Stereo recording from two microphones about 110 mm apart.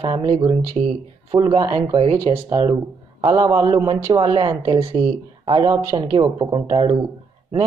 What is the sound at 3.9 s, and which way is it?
Speech, 45° right (ahead or behind).